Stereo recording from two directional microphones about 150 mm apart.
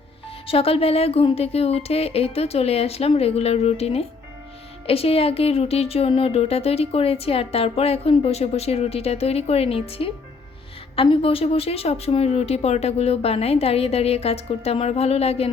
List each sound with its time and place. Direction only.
0.4 s a woman's voice: 40° left (ahead or behind)